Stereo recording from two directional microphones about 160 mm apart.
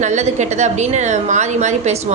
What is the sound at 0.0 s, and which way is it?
A woman's voice, 45° right (ahead or behind).